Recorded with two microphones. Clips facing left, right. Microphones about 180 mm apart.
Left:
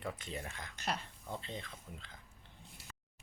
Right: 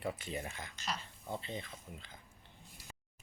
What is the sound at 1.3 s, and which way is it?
Speech, 5° right (ahead or behind).